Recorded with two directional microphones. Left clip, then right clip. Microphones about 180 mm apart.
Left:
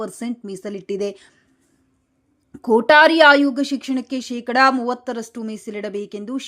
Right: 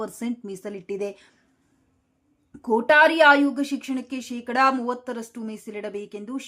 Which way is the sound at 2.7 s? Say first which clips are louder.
Left 5 dB; 25° left (ahead or behind).